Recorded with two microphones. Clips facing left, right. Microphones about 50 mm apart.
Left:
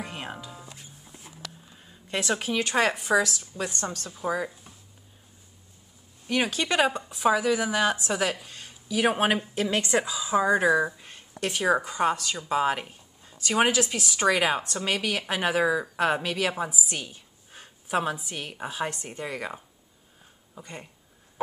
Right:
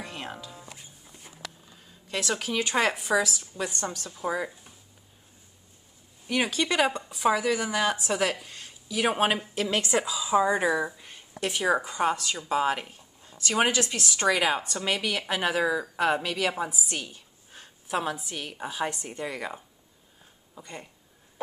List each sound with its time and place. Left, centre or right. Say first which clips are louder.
0.0 s music: left 1 dB; centre
1.8 s a sound: left 2 dB; centre
2.5 s speech: left 1 dB; centre
6.2 s speech: even; centre
10.9 s a sound: left 2 dB; centre
11.3 s a woman's voice: even; centre
11.6 s a woman's voice: left 1 dB; centre